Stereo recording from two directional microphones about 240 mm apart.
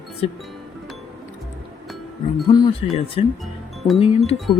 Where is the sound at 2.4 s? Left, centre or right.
Centre.